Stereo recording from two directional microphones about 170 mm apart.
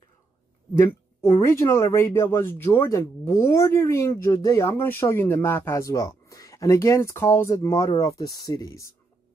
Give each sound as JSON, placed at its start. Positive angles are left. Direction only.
{"t": 0.8, "sound": "speech", "side_deg": 15}